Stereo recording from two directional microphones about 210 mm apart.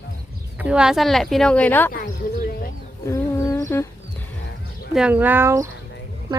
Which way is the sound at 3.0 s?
15° left (ahead or behind).